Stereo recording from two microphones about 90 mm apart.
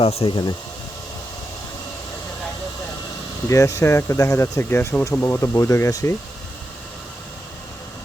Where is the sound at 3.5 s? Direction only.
35° left (ahead or behind).